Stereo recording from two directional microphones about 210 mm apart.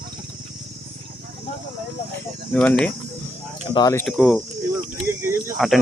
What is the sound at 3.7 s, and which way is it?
Speech, 15° left (ahead or behind).